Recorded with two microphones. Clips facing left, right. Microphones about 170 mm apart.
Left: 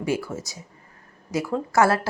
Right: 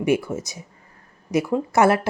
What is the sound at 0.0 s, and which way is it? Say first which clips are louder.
Speech: right 5 dB; 20° right (ahead or behind).